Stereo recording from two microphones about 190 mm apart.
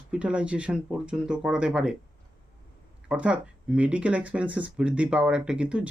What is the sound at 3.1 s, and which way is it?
Speech, 5° right (ahead or behind).